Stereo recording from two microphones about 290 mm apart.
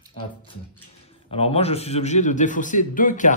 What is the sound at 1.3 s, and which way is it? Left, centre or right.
A man's voice, centre.